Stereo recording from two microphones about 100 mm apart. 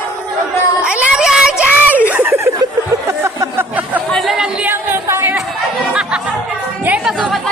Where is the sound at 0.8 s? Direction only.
10° right (ahead or behind).